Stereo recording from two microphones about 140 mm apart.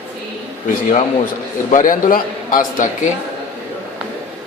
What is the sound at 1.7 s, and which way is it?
A man's voice, 65° left (ahead or behind).